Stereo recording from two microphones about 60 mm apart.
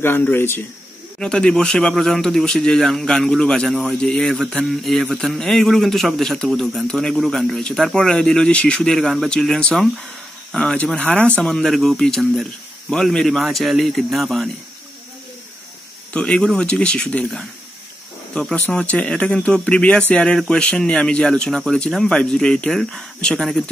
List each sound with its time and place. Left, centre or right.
0.0 s speech: left
1.2 s a man's voice: centre
9.6 s a man's voice: centre
16.1 s speech: centre
18.9 s speech: centre